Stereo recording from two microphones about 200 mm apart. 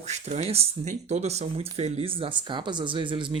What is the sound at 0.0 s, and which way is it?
Speech, 35° right (ahead or behind).